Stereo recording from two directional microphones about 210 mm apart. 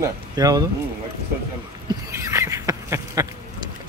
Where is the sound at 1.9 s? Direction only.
15° right (ahead or behind).